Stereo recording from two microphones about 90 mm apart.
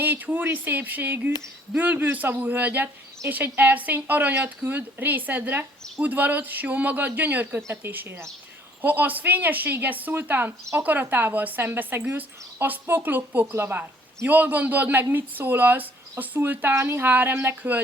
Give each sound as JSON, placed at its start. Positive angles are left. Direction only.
{"t": 0.0, "sound": "a woman's voice", "side_deg": -20}